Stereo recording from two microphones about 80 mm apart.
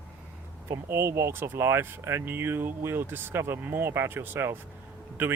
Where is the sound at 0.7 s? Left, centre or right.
Right.